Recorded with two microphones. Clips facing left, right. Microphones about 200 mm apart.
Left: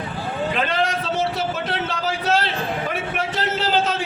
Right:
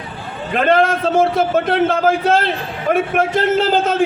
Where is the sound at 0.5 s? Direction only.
55° right (ahead or behind).